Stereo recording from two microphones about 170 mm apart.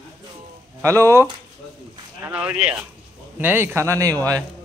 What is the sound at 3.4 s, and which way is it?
Speech, 15° right (ahead or behind).